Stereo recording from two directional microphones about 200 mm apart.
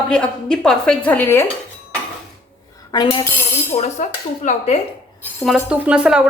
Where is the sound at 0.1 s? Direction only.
5° left (ahead or behind).